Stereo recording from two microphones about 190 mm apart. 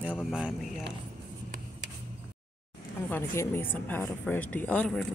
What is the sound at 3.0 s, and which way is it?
A woman's voice, 10° left (ahead or behind).